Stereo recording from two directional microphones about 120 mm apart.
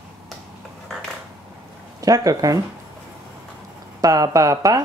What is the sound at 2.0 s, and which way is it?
Speech, 30° right (ahead or behind).